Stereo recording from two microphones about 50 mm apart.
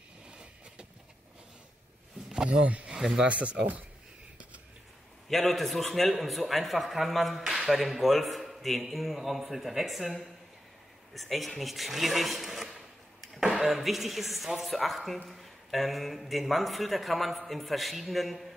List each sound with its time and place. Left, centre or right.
2.6 s speech: right
5.3 s speech: centre